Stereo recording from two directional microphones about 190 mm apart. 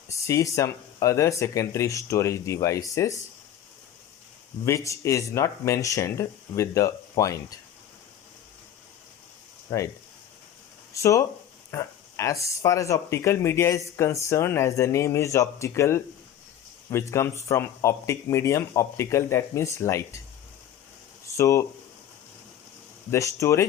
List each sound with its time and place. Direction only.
0.1 s speech: 15° left (ahead or behind)
4.6 s speech: 15° left (ahead or behind)
9.6 s speech: 15° left (ahead or behind)
10.9 s speech: 15° left (ahead or behind)
21.3 s speech: 15° left (ahead or behind)
23.1 s speech: 15° left (ahead or behind)